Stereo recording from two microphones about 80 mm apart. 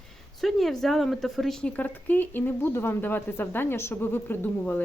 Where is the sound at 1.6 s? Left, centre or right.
Left.